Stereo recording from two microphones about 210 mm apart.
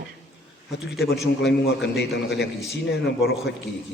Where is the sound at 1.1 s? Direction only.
55° left (ahead or behind).